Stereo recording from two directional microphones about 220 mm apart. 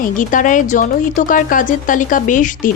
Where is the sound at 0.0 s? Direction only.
35° left (ahead or behind).